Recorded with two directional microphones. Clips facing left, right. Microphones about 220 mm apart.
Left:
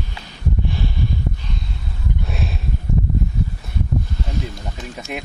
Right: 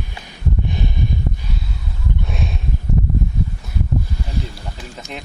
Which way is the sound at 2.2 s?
Centre (ahead or behind).